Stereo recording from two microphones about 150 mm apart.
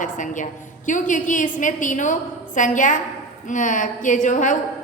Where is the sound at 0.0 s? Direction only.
60° left (ahead or behind).